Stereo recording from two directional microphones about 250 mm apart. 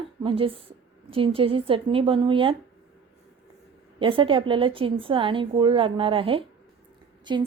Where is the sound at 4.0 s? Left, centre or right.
Right.